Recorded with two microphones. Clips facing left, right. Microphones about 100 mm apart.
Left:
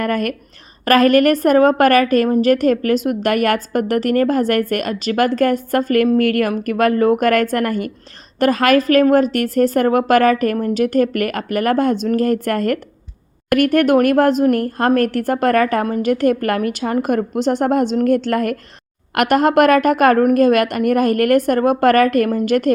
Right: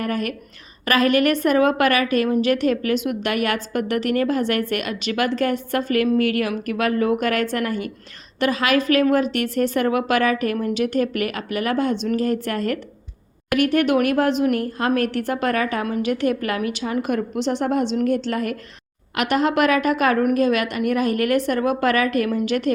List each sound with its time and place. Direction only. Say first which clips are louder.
0.0 s a woman's voice: left 5 dB; 55° left (ahead or behind)